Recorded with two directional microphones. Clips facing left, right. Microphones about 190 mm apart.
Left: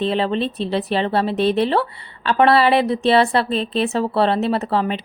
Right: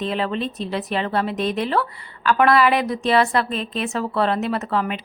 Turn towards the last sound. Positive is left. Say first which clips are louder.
# left 3 dB
turn(degrees=30)  # may be behind; listen again after turning